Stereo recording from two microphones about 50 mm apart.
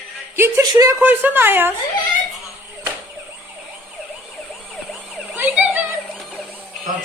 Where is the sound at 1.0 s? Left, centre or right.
Right.